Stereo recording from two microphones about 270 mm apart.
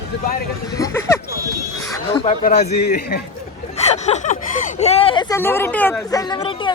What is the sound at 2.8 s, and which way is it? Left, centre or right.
Speech, left.